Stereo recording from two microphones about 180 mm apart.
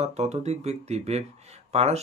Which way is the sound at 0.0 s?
35° right (ahead or behind).